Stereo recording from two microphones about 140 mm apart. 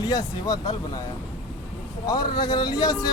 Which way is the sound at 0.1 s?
25° left (ahead or behind).